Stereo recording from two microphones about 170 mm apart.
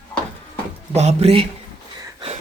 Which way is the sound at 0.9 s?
40° right (ahead or behind).